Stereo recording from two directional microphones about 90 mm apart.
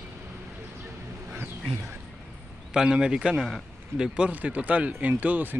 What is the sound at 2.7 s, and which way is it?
Speech, 10° right (ahead or behind).